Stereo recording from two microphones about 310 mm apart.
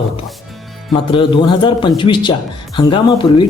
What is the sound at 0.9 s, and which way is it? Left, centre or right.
Speech, centre.